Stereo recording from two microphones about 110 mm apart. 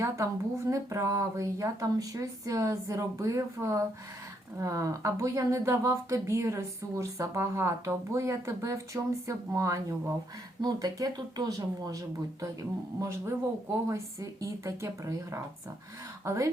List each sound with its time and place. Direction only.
0.0 s speech: 25° right (ahead or behind)